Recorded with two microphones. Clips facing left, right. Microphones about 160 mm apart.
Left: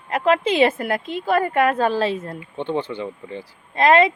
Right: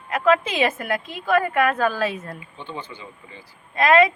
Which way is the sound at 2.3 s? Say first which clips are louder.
Left 10 dB; 65° left (ahead or behind).